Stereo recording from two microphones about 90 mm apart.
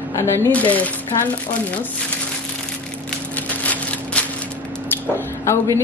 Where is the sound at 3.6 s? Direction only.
15° left (ahead or behind).